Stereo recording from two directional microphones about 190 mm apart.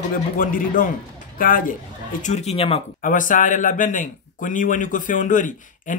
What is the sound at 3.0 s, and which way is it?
Speech, 45° left (ahead or behind).